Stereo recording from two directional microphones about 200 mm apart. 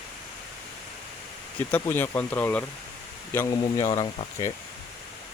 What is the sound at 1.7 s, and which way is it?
Speech, 10° left (ahead or behind).